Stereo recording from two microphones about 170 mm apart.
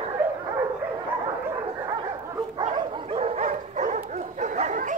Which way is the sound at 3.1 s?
40° right (ahead or behind).